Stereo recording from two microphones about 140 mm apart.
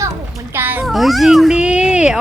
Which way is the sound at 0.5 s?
15° right (ahead or behind).